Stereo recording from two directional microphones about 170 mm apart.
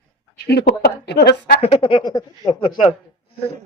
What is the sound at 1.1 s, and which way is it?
Speech, 75° left (ahead or behind).